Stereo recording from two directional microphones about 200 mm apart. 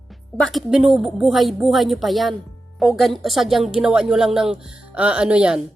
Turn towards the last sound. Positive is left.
turn(degrees=-5)  # may be behind; listen again after turning